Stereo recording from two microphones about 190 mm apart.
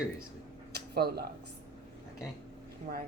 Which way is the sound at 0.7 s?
60° right (ahead or behind).